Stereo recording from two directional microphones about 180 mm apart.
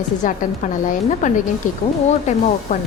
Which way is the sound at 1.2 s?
45° left (ahead or behind).